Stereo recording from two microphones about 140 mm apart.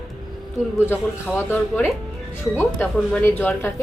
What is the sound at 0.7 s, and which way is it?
A woman's voice, 15° left (ahead or behind).